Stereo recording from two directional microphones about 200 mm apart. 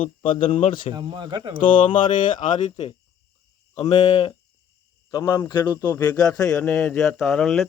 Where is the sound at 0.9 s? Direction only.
25° right (ahead or behind).